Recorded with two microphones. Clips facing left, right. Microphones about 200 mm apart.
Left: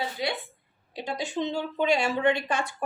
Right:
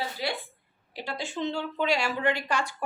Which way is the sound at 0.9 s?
20° left (ahead or behind).